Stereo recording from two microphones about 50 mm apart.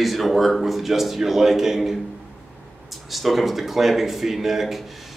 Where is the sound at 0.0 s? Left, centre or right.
Centre.